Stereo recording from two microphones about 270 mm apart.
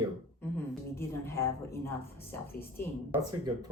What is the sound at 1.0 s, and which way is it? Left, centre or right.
Speech, centre.